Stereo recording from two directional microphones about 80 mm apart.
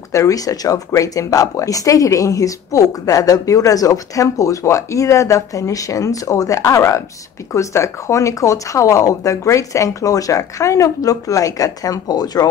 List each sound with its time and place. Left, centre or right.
0.1 s speech: left